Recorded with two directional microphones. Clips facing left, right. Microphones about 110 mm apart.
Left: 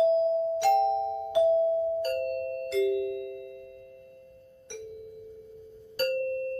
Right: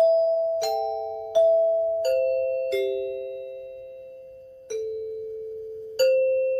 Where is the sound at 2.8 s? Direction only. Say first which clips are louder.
Right 1 dB; 55° right (ahead or behind).